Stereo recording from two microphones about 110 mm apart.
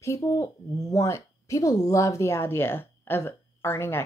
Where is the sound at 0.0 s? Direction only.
30° left (ahead or behind).